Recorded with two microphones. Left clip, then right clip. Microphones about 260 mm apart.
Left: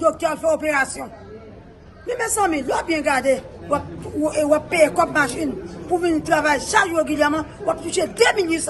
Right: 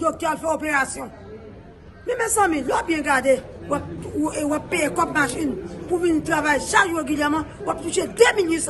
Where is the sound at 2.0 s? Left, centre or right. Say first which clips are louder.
Right 1 dB; centre.